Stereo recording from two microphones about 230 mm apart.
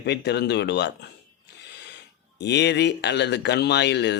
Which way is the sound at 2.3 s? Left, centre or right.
Left.